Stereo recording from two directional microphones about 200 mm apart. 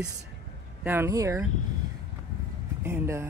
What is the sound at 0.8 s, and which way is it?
Speech, 10° right (ahead or behind).